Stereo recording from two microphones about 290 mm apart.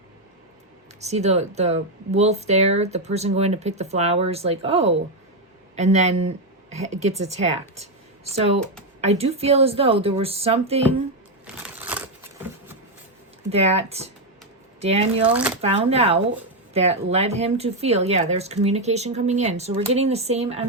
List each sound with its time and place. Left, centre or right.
1.0 s speech: right
11.8 s crumpling: centre
13.5 s speech: right
15.3 s speech: centre
15.6 s speech: right